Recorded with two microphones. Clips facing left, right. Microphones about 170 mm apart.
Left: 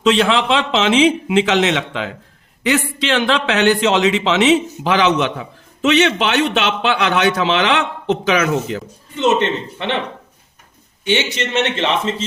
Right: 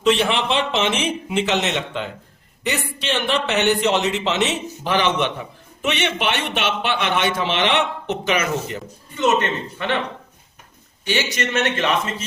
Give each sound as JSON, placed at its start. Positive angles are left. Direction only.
{"t": 0.0, "sound": "a man's voice", "side_deg": 90}
{"t": 9.1, "sound": "a man's voice", "side_deg": 25}
{"t": 11.0, "sound": "a man's voice", "side_deg": 25}